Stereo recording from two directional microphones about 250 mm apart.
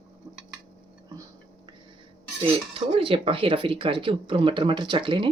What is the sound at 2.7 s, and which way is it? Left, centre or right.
Speech, right.